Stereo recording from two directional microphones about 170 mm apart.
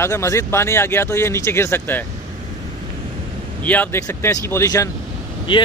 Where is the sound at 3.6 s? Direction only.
10° left (ahead or behind).